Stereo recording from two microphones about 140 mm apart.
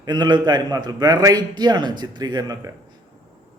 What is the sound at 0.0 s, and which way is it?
A man's voice, 30° right (ahead or behind).